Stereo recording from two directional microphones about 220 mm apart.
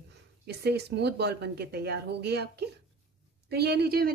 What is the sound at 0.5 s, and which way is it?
A woman's voice, 50° right (ahead or behind).